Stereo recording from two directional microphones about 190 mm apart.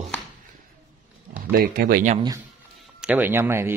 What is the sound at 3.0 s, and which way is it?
Speech, 10° right (ahead or behind).